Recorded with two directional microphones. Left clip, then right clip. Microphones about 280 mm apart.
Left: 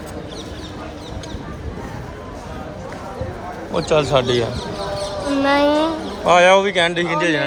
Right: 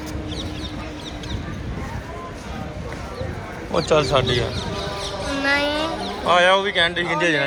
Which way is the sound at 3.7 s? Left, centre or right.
Centre.